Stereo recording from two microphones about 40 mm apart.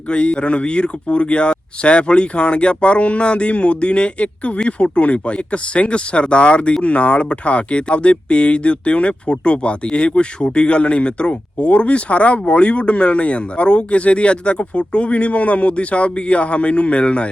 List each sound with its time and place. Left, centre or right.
0.1 s speech: left